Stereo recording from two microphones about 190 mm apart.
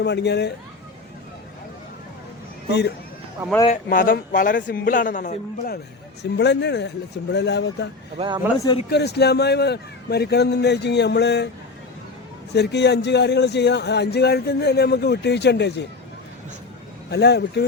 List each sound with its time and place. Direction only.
0.0 s speech: 60° left (ahead or behind)
2.6 s speech: 60° left (ahead or behind)
3.8 s a man's voice: 50° left (ahead or behind)
6.3 s speech: 65° left (ahead or behind)
8.5 s speech: 20° left (ahead or behind)
8.9 s speech: 60° left (ahead or behind)
12.5 s speech: 60° left (ahead or behind)
17.1 s speech: 60° left (ahead or behind)